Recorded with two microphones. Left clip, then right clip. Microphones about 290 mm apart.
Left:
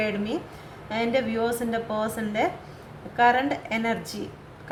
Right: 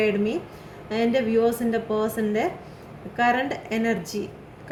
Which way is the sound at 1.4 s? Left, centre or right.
Left.